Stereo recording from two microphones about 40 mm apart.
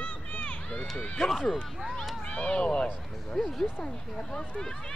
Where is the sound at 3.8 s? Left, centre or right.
Left.